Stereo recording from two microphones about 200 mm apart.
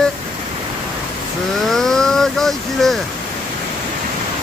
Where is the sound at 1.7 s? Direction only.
Centre (ahead or behind).